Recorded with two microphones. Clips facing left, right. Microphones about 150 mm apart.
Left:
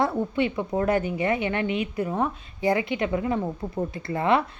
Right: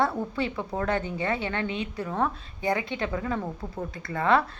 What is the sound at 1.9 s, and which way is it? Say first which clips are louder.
A woman's voice: left 2 dB; 30° left (ahead or behind).